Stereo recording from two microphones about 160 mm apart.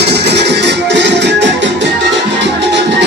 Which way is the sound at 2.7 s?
90° right.